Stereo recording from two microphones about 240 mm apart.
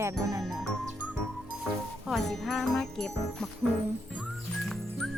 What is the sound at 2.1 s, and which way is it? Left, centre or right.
Speech, centre.